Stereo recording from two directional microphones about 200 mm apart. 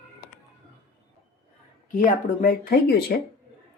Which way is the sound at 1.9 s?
45° left (ahead or behind).